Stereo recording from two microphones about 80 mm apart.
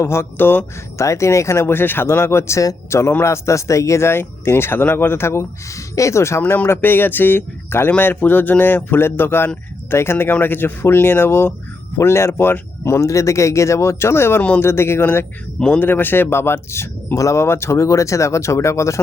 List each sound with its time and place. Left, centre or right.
0.0 s speech: left
0.9 s speech: left
6.4 s speech: left